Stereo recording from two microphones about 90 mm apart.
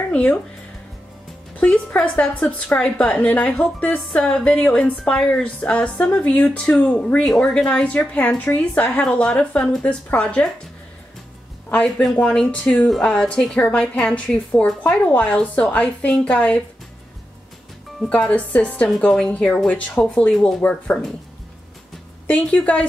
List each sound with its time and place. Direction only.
0.1 s speech: 15° left (ahead or behind)
1.6 s a woman's voice: 15° left (ahead or behind)
11.7 s a woman's voice: 10° left (ahead or behind)
18.3 s a woman's voice: 15° left (ahead or behind)
20.6 s a woman's voice: 15° left (ahead or behind)
22.3 s a woman's voice: 10° left (ahead or behind)